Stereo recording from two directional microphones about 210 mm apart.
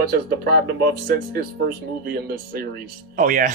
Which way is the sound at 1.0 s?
45° right (ahead or behind).